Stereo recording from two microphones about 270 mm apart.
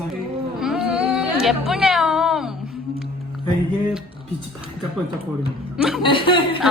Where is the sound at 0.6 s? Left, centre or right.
Centre.